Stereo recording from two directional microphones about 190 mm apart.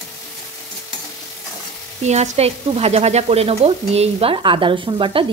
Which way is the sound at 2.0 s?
35° right (ahead or behind).